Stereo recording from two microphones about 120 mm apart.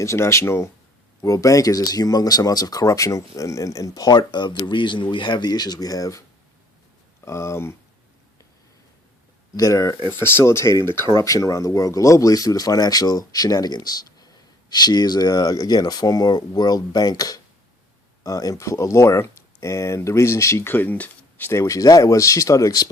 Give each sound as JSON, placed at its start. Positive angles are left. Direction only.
{"t": 0.0, "sound": "speech", "side_deg": 25}
{"t": 7.3, "sound": "speech", "side_deg": 25}
{"t": 9.6, "sound": "speech", "side_deg": 30}
{"t": 10.1, "sound": "speech", "side_deg": 15}